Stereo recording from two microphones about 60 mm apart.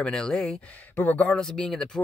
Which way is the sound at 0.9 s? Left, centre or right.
Left.